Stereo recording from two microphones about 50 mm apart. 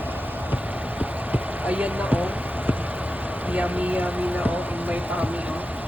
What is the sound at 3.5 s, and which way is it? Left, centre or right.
Speech, right.